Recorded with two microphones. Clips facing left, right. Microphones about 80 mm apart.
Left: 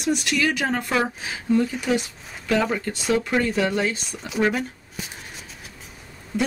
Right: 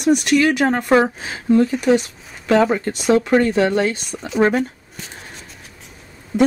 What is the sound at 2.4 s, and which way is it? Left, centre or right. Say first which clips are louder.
Speech: right 7 dB; right.